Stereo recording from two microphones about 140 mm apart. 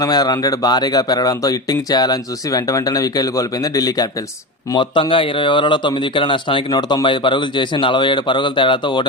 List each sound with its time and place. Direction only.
0.0 s a man's voice: 30° left (ahead or behind)